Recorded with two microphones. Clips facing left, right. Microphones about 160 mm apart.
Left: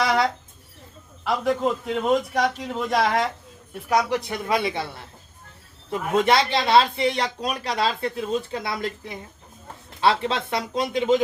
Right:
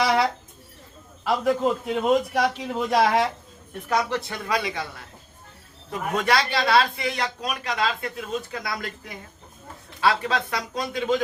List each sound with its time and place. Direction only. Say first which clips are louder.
0.0 s a sound: even; 5° right (ahead or behind)
1.2 s a man's voice: right 1 dB; centre (ahead or behind)
3.8 s speech: left 3 dB; 15° left (ahead or behind)